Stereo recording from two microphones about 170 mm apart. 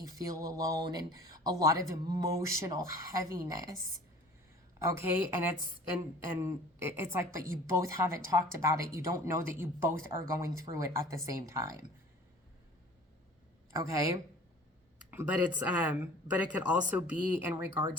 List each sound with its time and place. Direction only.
0.0 s speech: 20° right (ahead or behind)
4.8 s speech: 15° right (ahead or behind)
6.4 s speech: 15° right (ahead or behind)
13.7 s speech: 20° right (ahead or behind)